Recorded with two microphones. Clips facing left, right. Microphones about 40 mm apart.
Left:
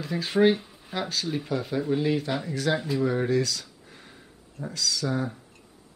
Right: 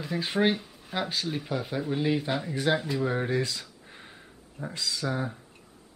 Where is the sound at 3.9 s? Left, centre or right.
Right.